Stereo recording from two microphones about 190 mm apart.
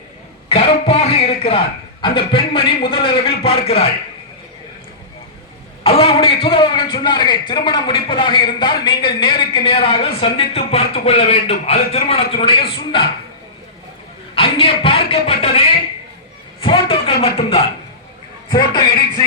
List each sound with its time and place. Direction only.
0.4 s a man's voice: 30° left (ahead or behind)
5.8 s a man's voice: 30° left (ahead or behind)
14.3 s a man's voice: 25° left (ahead or behind)